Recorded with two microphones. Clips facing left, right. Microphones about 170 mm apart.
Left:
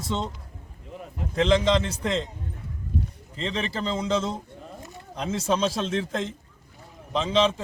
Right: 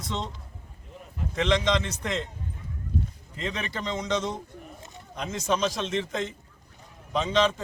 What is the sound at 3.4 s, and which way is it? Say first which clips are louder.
A man's voice: left 3 dB; 30° left (ahead or behind).